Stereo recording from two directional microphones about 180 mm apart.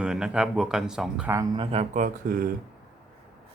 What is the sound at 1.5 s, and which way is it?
Speech, 30° right (ahead or behind).